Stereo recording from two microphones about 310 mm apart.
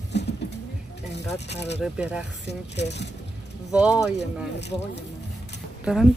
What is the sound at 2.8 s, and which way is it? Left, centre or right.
Speech, left.